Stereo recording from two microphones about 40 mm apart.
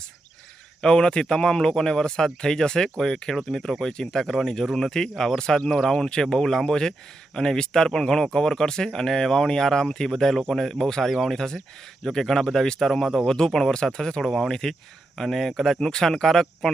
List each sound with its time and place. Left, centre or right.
0.8 s speech: centre
14.3 s speech: centre